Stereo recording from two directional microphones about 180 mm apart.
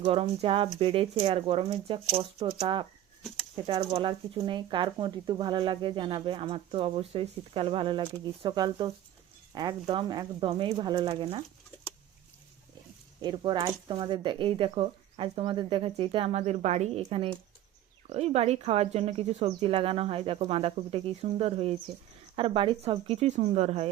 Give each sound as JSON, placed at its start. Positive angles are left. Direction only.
{"t": 0.0, "sound": "cricket", "side_deg": -30}
{"t": 0.8, "sound": "speech", "side_deg": -30}
{"t": 13.2, "sound": "speech", "side_deg": -25}
{"t": 18.1, "sound": "cricket", "side_deg": -35}